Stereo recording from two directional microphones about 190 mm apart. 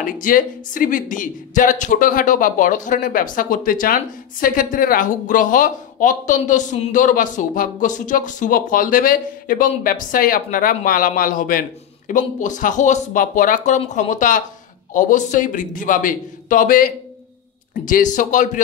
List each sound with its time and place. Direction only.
0.0 s speech: 45° left (ahead or behind)